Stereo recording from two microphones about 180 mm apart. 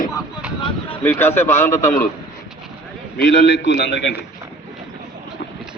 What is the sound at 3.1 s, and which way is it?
A man's voice, 70° left (ahead or behind).